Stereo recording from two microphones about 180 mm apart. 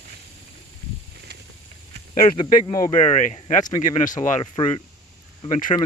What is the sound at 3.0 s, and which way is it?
Speech, 40° left (ahead or behind).